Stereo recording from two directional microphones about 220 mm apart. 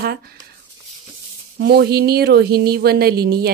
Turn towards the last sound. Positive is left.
turn(degrees=-45)  # may be behind; listen again after turning